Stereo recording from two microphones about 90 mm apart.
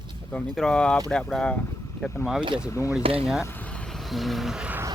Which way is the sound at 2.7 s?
35° left (ahead or behind).